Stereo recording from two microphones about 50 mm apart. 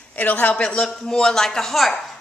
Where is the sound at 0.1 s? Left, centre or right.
Left.